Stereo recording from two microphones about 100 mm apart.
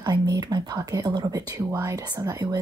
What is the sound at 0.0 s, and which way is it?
Speech, 40° right (ahead or behind).